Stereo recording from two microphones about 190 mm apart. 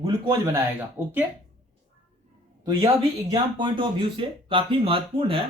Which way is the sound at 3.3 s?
25° right (ahead or behind).